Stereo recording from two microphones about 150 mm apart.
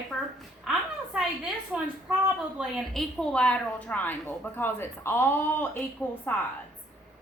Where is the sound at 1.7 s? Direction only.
5° right (ahead or behind); by 6.2 s 15° left (ahead or behind).